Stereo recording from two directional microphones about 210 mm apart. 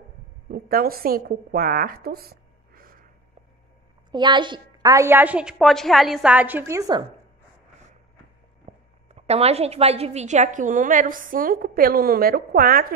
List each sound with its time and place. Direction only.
0.5 s a woman's voice: 45° right (ahead or behind)
4.1 s a woman's voice: 20° right (ahead or behind)
8.7 s a sound: 35° right (ahead or behind)
9.1 s a woman's voice: 30° right (ahead or behind)